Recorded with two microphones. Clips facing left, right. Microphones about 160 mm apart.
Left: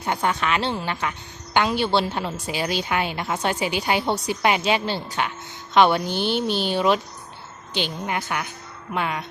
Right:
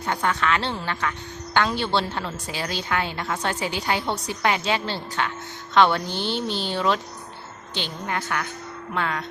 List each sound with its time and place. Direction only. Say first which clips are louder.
0.0 s a woman's voice: left 1 dB; 15° left (ahead or behind)